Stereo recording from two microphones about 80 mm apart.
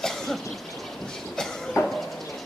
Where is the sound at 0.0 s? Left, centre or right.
Centre.